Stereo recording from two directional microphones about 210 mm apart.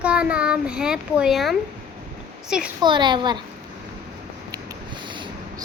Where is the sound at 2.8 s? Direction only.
20° right (ahead or behind).